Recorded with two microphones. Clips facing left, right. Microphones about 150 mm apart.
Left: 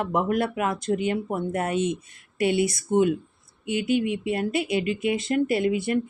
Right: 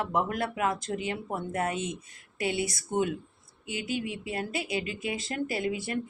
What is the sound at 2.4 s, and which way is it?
Speech, 65° left (ahead or behind).